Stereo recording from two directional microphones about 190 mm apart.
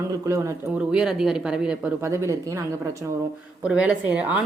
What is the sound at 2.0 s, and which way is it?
Speech, 15° right (ahead or behind).